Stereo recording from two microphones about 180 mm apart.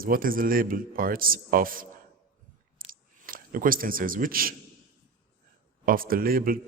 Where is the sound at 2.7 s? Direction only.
50° right (ahead or behind).